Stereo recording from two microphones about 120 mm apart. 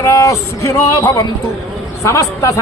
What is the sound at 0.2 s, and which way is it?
Speech, 25° left (ahead or behind).